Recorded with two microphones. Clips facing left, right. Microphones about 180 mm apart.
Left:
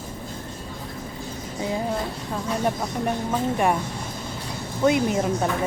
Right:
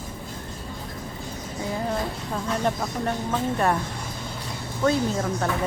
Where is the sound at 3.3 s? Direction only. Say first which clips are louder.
Left 1 dB; 10° left (ahead or behind).